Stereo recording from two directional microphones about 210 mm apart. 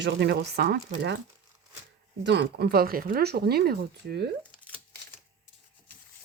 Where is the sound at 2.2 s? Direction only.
55° right (ahead or behind).